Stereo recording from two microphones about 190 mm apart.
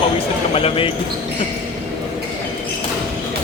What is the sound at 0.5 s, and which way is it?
Speech, 30° left (ahead or behind).